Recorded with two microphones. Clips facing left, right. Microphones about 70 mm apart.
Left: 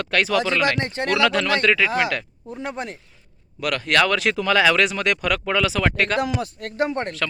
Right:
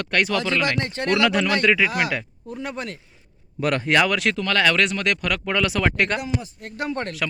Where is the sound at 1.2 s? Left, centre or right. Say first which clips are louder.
Left 1 dB; centre.